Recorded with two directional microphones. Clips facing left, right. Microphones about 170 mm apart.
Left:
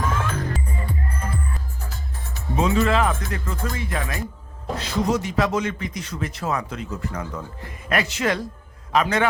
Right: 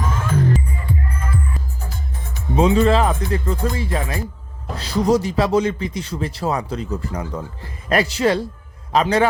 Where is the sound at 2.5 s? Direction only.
30° right (ahead or behind).